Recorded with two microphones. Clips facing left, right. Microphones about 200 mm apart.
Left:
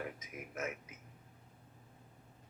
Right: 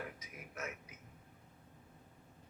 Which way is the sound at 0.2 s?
50° left (ahead or behind).